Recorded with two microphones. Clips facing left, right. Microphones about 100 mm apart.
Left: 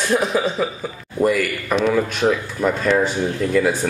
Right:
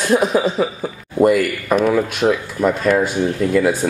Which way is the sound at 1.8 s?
10° right (ahead or behind).